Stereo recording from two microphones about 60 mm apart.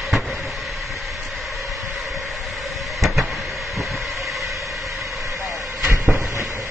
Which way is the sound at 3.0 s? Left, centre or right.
Centre.